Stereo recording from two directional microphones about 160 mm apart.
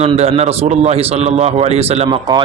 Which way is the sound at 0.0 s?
40° right (ahead or behind).